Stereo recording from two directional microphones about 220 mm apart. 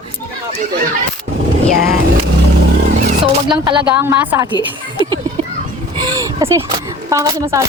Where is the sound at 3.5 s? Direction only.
20° right (ahead or behind).